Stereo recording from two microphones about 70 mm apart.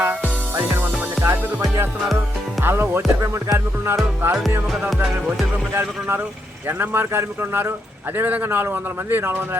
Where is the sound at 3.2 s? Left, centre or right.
Right.